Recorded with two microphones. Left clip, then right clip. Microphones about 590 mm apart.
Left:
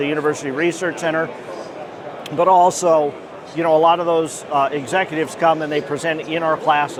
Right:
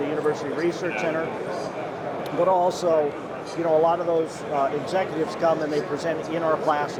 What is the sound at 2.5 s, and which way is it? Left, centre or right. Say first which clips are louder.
Speech: left 9 dB; left.